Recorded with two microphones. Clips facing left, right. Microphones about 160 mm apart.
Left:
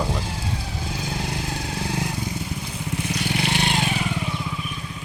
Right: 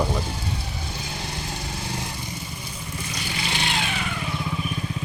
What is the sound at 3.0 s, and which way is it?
Vehicle, 65° left (ahead or behind).